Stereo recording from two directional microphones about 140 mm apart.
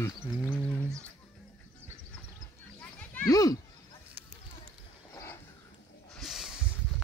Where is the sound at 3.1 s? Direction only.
20° left (ahead or behind).